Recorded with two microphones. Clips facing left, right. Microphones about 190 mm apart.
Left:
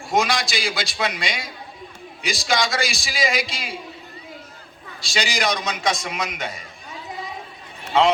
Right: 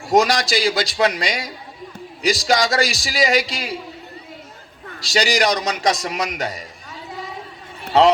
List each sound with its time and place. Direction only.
0.1 s a man's voice: 40° right (ahead or behind)
4.9 s a man's voice: 40° right (ahead or behind)
7.9 s a man's voice: 35° right (ahead or behind)